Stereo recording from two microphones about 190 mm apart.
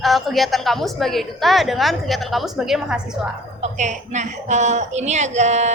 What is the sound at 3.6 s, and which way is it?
A woman's voice, 40° right (ahead or behind).